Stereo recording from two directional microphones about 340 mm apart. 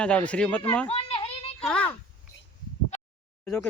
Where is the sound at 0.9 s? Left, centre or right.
Centre.